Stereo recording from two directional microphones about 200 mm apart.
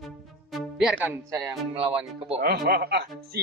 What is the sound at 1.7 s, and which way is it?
Speech, 30° right (ahead or behind).